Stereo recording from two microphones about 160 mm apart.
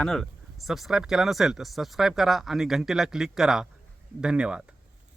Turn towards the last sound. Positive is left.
turn(degrees=-5)  # may be behind; listen again after turning